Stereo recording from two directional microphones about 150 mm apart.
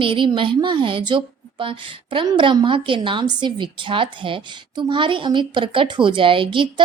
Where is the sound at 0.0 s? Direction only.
35° right (ahead or behind).